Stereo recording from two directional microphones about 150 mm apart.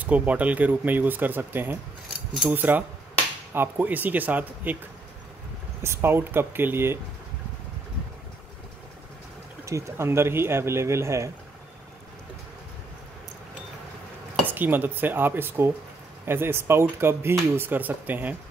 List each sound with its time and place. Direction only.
0.0 s speech: 10° right (ahead or behind)
5.8 s speech: 15° right (ahead or behind)
9.7 s speech: 20° right (ahead or behind)
14.4 s speech: 10° right (ahead or behind)